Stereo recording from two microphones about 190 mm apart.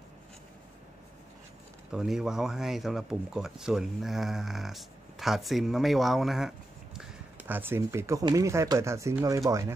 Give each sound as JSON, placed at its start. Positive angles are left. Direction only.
{"t": 1.9, "sound": "speech", "side_deg": -5}